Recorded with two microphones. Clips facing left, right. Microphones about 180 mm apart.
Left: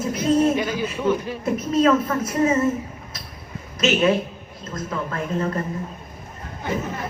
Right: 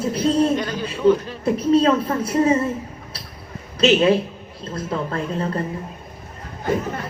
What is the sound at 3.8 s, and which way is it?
A woman's voice, 30° right (ahead or behind).